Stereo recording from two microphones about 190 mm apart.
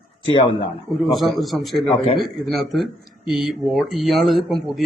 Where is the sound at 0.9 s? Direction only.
Centre (ahead or behind).